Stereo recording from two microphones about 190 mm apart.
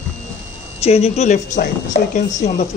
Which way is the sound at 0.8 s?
35° left (ahead or behind).